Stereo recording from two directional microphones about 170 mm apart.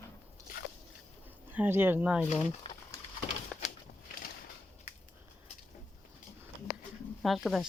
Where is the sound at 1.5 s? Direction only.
10° right (ahead or behind).